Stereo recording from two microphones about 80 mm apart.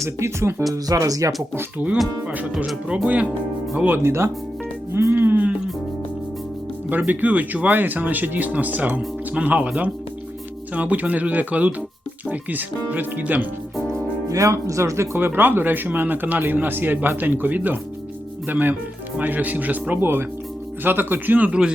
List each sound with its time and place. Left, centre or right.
0.0 s speech: right
0.7 s speech: right
2.2 s speech: centre
4.9 s music: right
7.1 s speech: right
14.3 s speech: right; by 21.7 s centre